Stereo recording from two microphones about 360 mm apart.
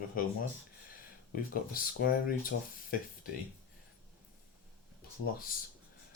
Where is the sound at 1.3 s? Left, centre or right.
Left.